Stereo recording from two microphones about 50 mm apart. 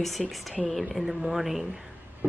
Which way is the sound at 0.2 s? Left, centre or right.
Centre.